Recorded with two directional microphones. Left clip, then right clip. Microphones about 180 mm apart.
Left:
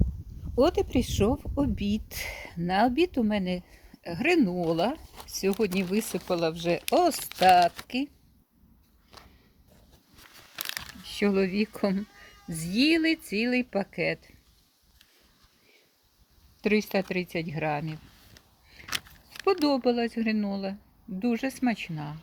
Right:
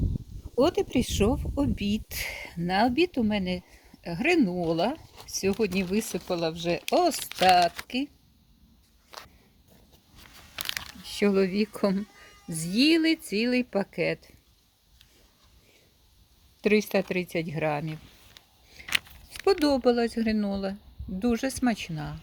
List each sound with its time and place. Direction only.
0.5 s speech: centre (ahead or behind)
11.0 s speech: 15° right (ahead or behind)
16.6 s speech: 15° right (ahead or behind)
18.9 s keys jangling: 30° right (ahead or behind)
19.5 s speech: 10° right (ahead or behind)